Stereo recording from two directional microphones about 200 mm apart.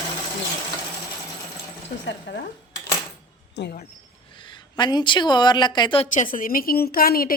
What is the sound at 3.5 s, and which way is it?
Speech, 60° left (ahead or behind).